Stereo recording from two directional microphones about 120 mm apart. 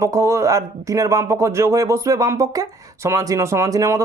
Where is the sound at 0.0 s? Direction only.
25° right (ahead or behind).